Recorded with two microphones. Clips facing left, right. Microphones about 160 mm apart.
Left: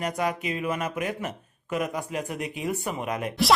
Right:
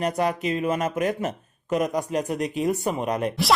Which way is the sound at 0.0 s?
35° right (ahead or behind).